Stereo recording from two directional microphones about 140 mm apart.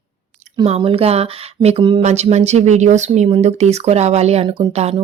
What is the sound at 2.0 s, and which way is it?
A woman's voice, 50° right (ahead or behind).